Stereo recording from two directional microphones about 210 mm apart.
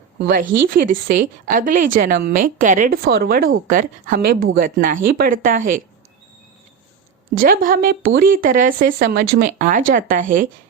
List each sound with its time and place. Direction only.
0.3 s speech: 40° right (ahead or behind)
7.4 s speech: 40° right (ahead or behind)